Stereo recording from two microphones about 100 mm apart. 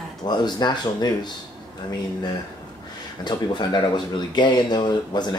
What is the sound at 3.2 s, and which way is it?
Speech, 50° left (ahead or behind).